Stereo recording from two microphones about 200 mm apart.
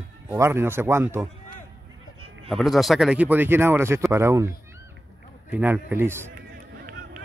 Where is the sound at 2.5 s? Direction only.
Centre (ahead or behind).